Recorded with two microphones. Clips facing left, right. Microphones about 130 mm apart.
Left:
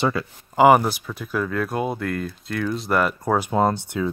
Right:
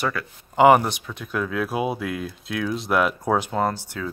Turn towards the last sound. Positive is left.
turn(degrees=20)  # may be behind; listen again after turning